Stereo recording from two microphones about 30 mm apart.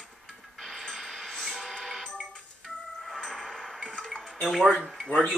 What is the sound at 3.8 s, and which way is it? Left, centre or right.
Music, left.